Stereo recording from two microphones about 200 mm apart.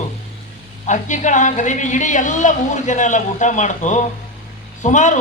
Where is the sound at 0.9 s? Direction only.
40° left (ahead or behind).